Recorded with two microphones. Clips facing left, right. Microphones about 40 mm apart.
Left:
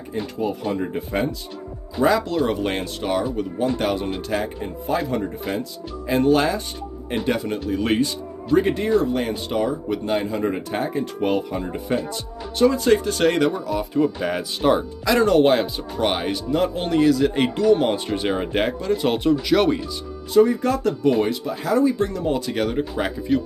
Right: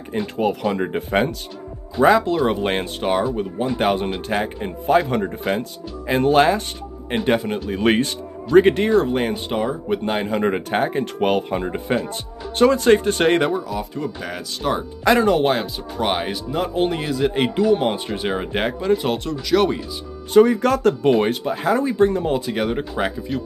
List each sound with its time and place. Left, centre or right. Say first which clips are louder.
0.4 s speech: right 4 dB; right
0.8 s speech: right 4 dB; right
2.0 s speech: right 4 dB; right
3.8 s speech: right 3 dB; right
6.0 s speech: right 3 dB; right
7.6 s speech: left 1 dB; right
10.3 s speech: right 4 dB; right
13.7 s speech: left 5 dB; centre
15.1 s speech: left 5 dB; centre
19.0 s speech: left 4 dB; centre
20.3 s speech: right 3 dB; right
21.0 s speech: right 2 dB; right
22.3 s speech: right 1 dB; centre
23.0 s speech: right 3 dB; right